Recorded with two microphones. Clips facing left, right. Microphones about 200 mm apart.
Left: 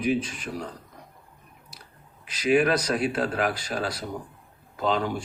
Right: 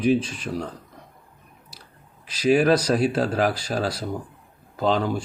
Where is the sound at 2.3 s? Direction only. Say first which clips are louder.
Right 3 dB; 30° right (ahead or behind).